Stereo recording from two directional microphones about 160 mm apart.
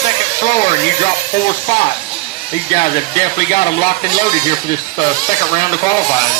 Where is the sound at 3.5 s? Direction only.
45° left (ahead or behind).